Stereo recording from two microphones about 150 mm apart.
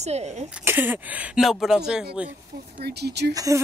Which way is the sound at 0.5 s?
10° right (ahead or behind).